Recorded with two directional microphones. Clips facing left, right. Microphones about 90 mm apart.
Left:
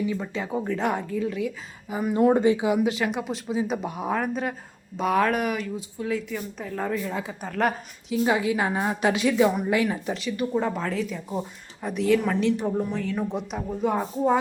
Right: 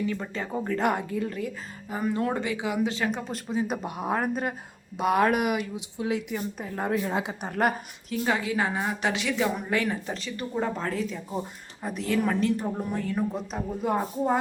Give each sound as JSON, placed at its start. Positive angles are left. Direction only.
{"t": 0.2, "sound": "a woman's voice", "side_deg": 5}
{"t": 2.1, "sound": "a woman's voice", "side_deg": 20}
{"t": 3.2, "sound": "a woman's voice", "side_deg": 5}
{"t": 6.9, "sound": "a woman's voice", "side_deg": -35}
{"t": 7.3, "sound": "a woman's voice", "side_deg": -25}
{"t": 8.2, "sound": "a woman's voice", "side_deg": 20}
{"t": 9.8, "sound": "a woman's voice", "side_deg": 5}
{"t": 13.0, "sound": "speech", "side_deg": -15}
{"t": 13.3, "sound": "a woman's voice", "side_deg": 0}